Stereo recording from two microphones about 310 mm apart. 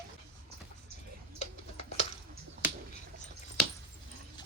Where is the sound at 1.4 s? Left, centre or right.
Left.